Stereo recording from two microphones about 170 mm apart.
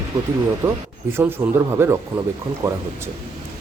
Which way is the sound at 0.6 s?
15° right (ahead or behind).